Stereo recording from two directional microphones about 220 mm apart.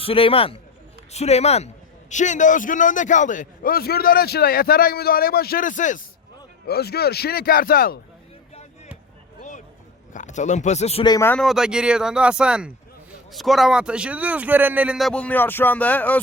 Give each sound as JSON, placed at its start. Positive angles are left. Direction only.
{"t": 0.0, "sound": "a man's voice", "side_deg": 25}
{"t": 6.7, "sound": "speech", "side_deg": 45}
{"t": 9.4, "sound": "a sound", "side_deg": 35}
{"t": 10.1, "sound": "speech", "side_deg": 35}